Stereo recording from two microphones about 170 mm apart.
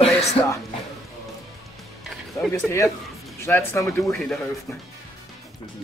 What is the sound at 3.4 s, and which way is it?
Speech, 10° left (ahead or behind).